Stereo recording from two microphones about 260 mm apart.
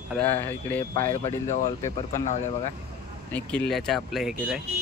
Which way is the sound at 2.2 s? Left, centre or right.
Left.